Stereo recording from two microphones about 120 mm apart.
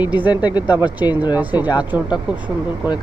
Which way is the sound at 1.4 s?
15° right (ahead or behind).